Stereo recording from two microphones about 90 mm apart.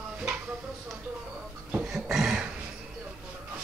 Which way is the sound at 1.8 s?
5° right (ahead or behind).